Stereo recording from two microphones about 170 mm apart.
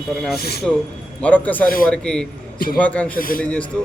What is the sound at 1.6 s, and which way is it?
Speech, 55° left (ahead or behind).